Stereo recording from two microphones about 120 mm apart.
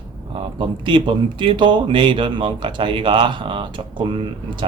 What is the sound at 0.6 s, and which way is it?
Speech, 40° right (ahead or behind).